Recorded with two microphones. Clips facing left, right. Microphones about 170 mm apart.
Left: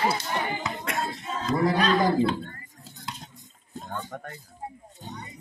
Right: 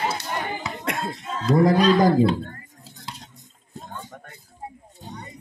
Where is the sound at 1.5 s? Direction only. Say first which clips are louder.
Right 6 dB; 45° right (ahead or behind).